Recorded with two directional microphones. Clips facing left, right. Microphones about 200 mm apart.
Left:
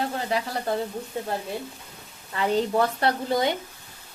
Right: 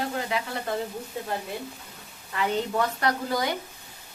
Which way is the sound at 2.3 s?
30° left (ahead or behind).